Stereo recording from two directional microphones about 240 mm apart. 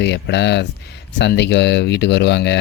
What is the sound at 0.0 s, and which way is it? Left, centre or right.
Speech, left.